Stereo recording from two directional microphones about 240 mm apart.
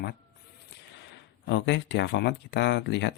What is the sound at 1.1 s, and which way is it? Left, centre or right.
Speech, left.